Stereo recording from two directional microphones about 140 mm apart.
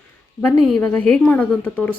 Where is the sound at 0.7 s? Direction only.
5° left (ahead or behind).